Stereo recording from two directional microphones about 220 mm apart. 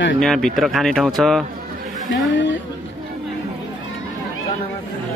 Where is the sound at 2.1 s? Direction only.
55° left (ahead or behind).